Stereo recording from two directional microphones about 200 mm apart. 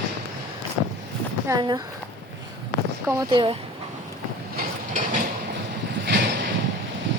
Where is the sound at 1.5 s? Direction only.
20° right (ahead or behind).